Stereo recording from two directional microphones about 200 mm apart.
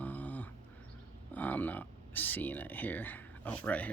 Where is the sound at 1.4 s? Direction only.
10° left (ahead or behind).